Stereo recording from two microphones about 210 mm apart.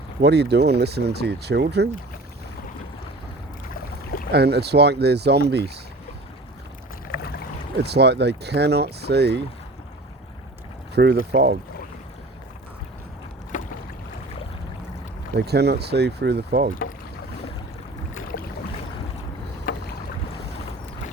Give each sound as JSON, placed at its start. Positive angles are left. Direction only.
{"t": 0.2, "sound": "speech", "side_deg": -50}
{"t": 4.3, "sound": "speech", "side_deg": -50}
{"t": 7.1, "sound": "boat", "side_deg": 45}
{"t": 7.8, "sound": "speech", "side_deg": -50}
{"t": 10.9, "sound": "speech", "side_deg": -50}
{"t": 13.5, "sound": "boat", "side_deg": 40}
{"t": 15.4, "sound": "speech", "side_deg": -50}
{"t": 19.7, "sound": "boat", "side_deg": 40}